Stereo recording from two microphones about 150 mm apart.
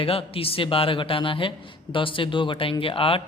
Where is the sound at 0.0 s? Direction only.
40° left (ahead or behind).